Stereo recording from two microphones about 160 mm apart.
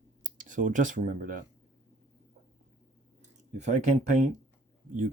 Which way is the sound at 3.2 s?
45° right (ahead or behind).